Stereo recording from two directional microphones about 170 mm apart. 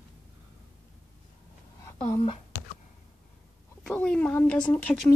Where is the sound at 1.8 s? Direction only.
15° left (ahead or behind).